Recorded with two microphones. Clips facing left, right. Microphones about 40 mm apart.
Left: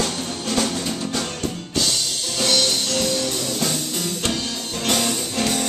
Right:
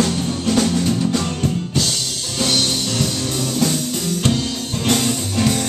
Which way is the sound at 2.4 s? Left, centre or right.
Centre.